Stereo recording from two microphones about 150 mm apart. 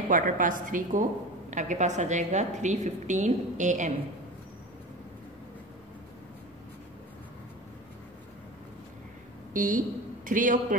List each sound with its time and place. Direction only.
0.1 s a woman's voice: 60° right (ahead or behind)
9.5 s a woman's voice: 65° right (ahead or behind)